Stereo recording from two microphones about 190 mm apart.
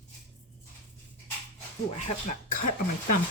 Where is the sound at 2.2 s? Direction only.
45° left (ahead or behind).